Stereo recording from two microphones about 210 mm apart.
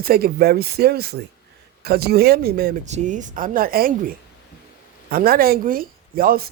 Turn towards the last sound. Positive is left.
turn(degrees=-45)  # may be behind; listen again after turning